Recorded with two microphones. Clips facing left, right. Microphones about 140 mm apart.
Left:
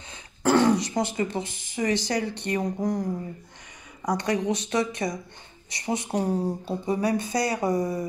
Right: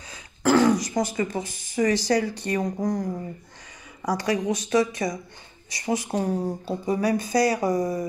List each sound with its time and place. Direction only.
0.1 s speech: 30° left (ahead or behind)